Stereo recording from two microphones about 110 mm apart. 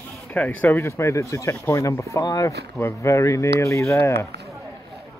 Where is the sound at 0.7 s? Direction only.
25° left (ahead or behind).